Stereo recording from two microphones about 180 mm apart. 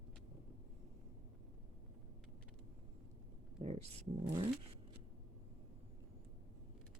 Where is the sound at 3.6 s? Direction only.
35° right (ahead or behind).